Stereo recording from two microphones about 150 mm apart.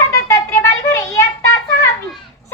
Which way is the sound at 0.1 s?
20° left (ahead or behind).